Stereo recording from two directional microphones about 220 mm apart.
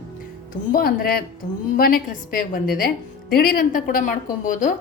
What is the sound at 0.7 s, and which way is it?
A woman's voice, 40° left (ahead or behind).